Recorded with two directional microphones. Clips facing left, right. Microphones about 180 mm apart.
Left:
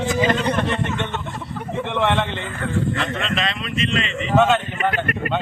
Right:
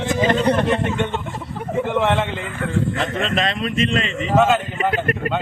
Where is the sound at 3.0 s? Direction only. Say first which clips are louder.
Right 3 dB; 45° right (ahead or behind).